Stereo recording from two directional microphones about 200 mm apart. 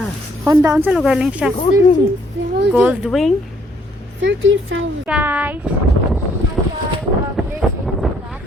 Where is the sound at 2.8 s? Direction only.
5° right (ahead or behind).